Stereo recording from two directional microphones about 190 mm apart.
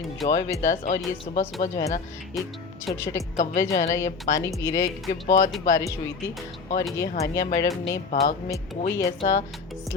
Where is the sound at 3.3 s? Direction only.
40° left (ahead or behind).